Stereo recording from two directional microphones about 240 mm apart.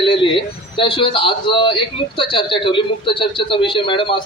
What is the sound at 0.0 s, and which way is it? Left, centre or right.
A man's voice, left.